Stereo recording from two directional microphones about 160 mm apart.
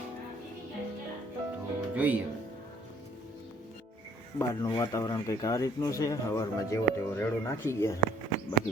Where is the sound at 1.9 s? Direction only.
10° right (ahead or behind).